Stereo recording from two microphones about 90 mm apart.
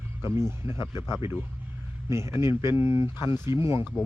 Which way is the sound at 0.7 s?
65° left (ahead or behind).